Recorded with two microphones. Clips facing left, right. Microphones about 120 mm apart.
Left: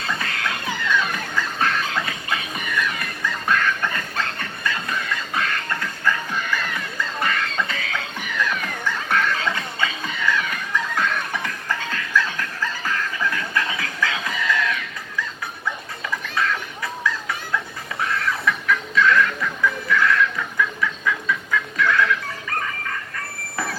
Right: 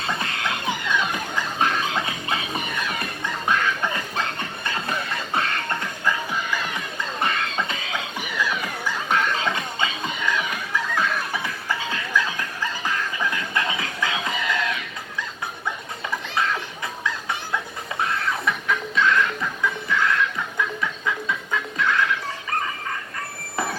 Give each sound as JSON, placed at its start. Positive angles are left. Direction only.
{"t": 0.0, "sound": "music", "side_deg": -25}
{"t": 16.2, "sound": "a sound", "side_deg": -25}
{"t": 18.0, "sound": "music", "side_deg": -25}